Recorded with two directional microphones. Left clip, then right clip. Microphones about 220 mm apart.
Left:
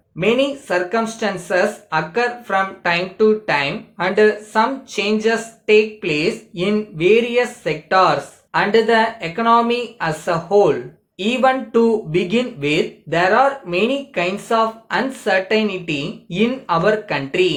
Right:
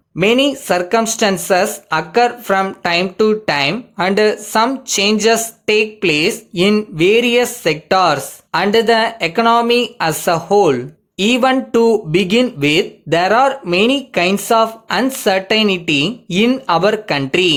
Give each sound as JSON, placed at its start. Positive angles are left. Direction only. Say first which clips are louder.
{"t": 0.2, "sound": "speech", "louder": "right 4 dB", "side_deg": -50}